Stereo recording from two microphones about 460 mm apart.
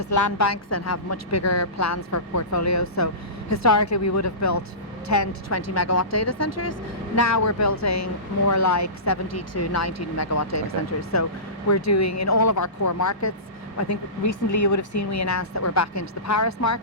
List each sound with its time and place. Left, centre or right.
0.0 s speech: left